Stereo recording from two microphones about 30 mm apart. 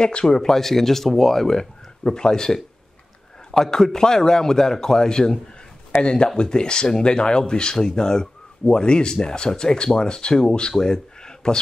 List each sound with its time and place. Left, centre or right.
0.2 s speech: centre
2.1 s speech: left
3.5 s speech: left
6.0 s speech: left